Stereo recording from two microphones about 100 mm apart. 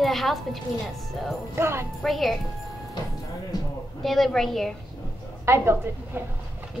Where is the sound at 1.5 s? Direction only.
25° right (ahead or behind).